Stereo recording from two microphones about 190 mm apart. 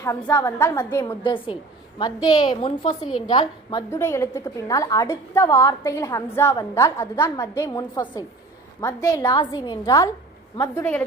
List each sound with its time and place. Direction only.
0.0 s a woman's voice: 15° left (ahead or behind)
1.2 s a woman's voice: 25° left (ahead or behind); by 11.0 s 10° left (ahead or behind)